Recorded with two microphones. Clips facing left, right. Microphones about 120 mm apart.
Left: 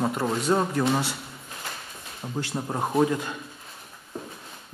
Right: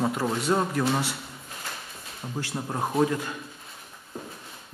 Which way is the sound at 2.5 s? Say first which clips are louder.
Left 1 dB; 5° left (ahead or behind).